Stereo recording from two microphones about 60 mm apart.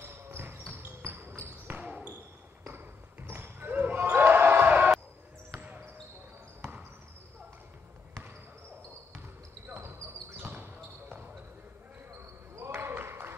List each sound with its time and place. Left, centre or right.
0.0 s basketball bounce: right
1.8 s basketball bounce: centre
2.6 s basketball bounce: right
6.6 s basketball bounce: right
9.7 s basketball bounce: right
12.1 s basketball bounce: right